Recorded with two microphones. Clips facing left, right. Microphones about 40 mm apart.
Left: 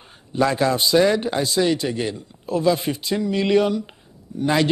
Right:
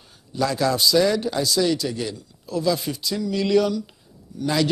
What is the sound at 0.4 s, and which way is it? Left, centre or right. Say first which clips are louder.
A man's voice: left 2 dB; left.